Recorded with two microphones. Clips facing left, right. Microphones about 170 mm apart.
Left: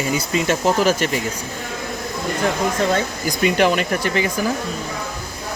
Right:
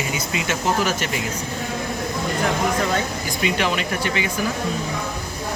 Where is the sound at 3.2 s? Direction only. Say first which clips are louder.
Left 8 dB; 45° left (ahead or behind).